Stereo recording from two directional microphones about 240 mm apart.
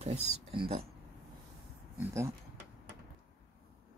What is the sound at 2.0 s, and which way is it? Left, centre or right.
Speech, centre.